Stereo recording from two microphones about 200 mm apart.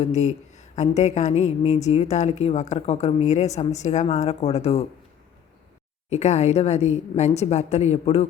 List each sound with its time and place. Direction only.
0.0 s a woman's voice: 35° left (ahead or behind)
6.1 s a woman's voice: 35° left (ahead or behind)